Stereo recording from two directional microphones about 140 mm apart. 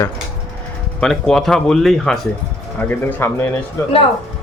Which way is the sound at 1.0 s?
5° left (ahead or behind).